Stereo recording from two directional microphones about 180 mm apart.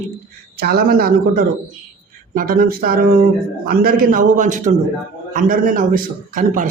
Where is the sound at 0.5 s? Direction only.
60° right (ahead or behind).